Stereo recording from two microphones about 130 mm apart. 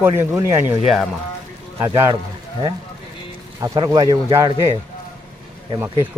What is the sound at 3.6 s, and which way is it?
Speech, 25° right (ahead or behind).